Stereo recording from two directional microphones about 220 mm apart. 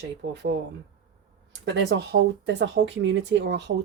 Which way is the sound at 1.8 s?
55° right (ahead or behind).